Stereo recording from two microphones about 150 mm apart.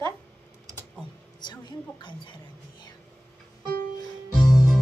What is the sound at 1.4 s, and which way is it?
Speech, 30° left (ahead or behind).